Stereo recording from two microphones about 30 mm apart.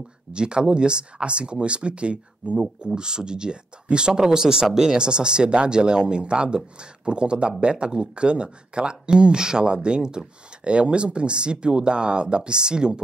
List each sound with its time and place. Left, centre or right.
0.3 s speech: right
2.9 s speech: right